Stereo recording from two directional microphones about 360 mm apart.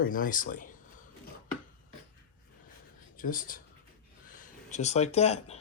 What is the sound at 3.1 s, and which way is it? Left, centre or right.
Speech, left.